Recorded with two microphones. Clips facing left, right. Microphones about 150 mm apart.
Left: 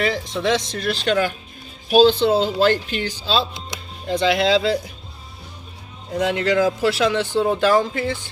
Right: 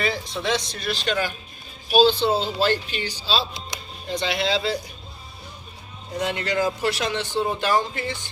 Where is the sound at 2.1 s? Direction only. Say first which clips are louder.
Left 5 dB; 60° left (ahead or behind).